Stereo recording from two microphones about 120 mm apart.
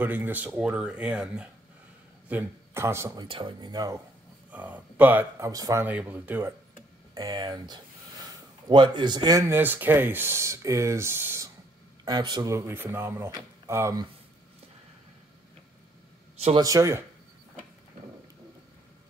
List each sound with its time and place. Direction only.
0.0 s a man's voice: 15° right (ahead or behind)
3.2 s speech: 45° right (ahead or behind)
4.5 s speech: 10° right (ahead or behind)
5.4 s speech: 30° right (ahead or behind)
5.9 s speech: 15° right (ahead or behind)
7.2 s speech: 35° right (ahead or behind)
9.4 s speech: 15° right (ahead or behind)
12.0 s speech: 35° right (ahead or behind)
16.5 s speech: 30° right (ahead or behind)